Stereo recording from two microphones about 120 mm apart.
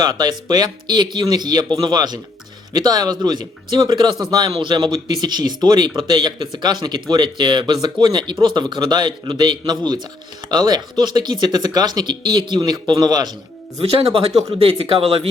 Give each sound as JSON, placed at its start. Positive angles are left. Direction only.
{"t": 0.0, "sound": "speech", "side_deg": -35}
{"t": 14.6, "sound": "speech", "side_deg": -50}